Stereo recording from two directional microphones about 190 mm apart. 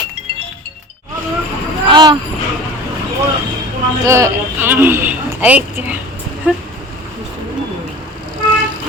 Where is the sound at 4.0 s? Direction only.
15° right (ahead or behind).